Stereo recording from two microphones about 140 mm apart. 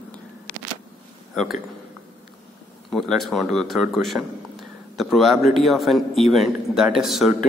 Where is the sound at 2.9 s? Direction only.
Centre (ahead or behind).